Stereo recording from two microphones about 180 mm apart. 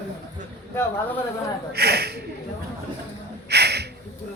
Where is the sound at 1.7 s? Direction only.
60° right (ahead or behind).